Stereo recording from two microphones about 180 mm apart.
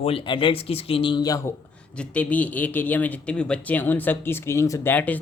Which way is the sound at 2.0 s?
10° left (ahead or behind).